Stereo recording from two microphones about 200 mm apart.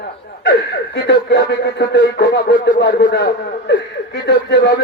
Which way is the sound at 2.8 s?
60° left (ahead or behind).